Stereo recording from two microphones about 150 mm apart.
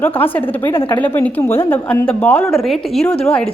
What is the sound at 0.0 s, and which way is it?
A woman's voice, 15° left (ahead or behind).